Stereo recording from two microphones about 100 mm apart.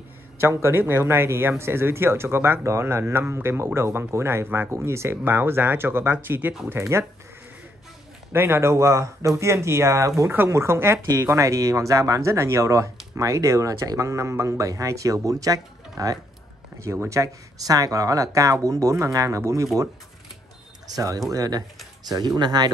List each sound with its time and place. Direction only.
0.4 s speech: 25° right (ahead or behind)
8.3 s speech: 25° right (ahead or behind)
16.8 s speech: 30° right (ahead or behind); by 22.7 s 45° right (ahead or behind)